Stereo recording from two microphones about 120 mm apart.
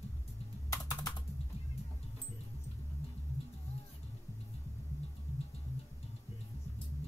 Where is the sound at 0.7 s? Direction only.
30° left (ahead or behind).